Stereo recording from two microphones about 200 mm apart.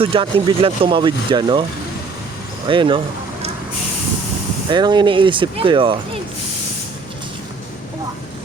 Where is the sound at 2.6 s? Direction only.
25° right (ahead or behind).